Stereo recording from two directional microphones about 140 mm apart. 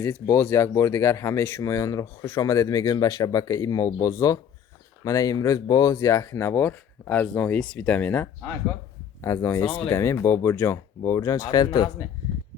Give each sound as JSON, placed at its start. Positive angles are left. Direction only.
{"t": 0.0, "sound": "speech", "side_deg": 15}
{"t": 9.6, "sound": "speech", "side_deg": 40}
{"t": 9.9, "sound": "speech", "side_deg": 15}